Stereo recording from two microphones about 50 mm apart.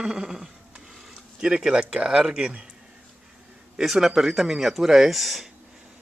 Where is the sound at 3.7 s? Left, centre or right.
Centre.